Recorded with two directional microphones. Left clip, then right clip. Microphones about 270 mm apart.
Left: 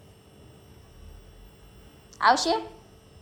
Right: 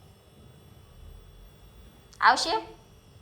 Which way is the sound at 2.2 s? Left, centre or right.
Centre.